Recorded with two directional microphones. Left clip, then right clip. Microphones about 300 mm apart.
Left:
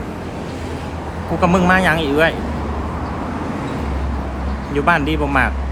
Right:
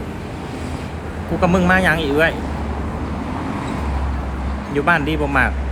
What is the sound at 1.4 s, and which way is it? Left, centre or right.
Speech, centre.